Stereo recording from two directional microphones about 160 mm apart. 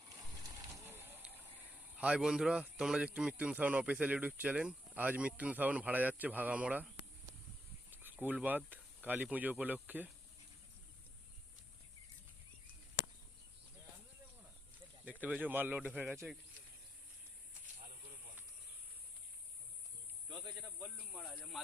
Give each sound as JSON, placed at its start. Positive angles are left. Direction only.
{"t": 0.4, "sound": "speech", "side_deg": -20}
{"t": 15.0, "sound": "speech", "side_deg": -10}
{"t": 20.3, "sound": "snake", "side_deg": -30}
{"t": 20.6, "sound": "snake", "side_deg": -15}
{"t": 20.8, "sound": "speech", "side_deg": -5}